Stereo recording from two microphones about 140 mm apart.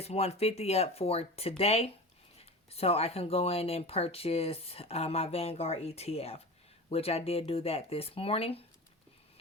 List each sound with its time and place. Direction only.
0.0 s speech: 50° left (ahead or behind)